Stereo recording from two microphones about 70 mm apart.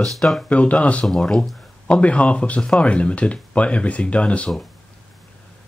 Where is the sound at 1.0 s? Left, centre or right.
Centre.